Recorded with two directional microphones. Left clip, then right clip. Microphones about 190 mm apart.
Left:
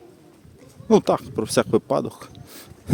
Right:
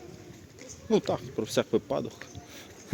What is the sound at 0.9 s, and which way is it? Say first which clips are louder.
Speech: left 9 dB; 50° left (ahead or behind).